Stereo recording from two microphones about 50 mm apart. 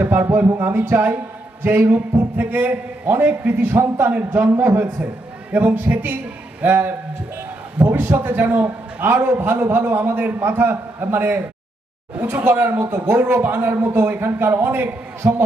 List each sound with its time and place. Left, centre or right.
0.0 s a man's voice: right
0.3 s a man's voice: right
10.2 s a man's voice: right